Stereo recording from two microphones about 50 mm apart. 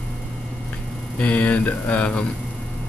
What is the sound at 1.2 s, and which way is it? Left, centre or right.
Speech, left.